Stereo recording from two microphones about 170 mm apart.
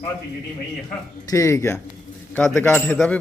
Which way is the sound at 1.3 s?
20° left (ahead or behind).